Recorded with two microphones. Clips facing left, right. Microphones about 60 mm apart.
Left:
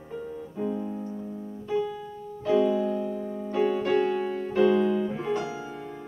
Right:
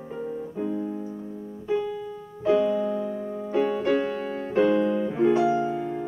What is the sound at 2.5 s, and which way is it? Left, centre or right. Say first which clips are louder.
Music: left 3 dB; centre.